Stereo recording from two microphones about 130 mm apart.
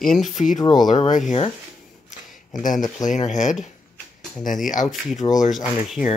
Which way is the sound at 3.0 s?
70° left (ahead or behind).